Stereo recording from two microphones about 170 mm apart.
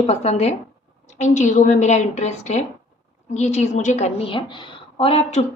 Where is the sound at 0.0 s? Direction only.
40° left (ahead or behind).